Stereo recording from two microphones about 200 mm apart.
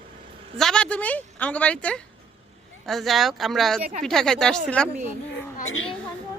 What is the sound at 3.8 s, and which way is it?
Speech, 30° right (ahead or behind).